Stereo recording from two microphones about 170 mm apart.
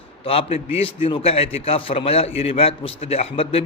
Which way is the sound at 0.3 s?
35° left (ahead or behind).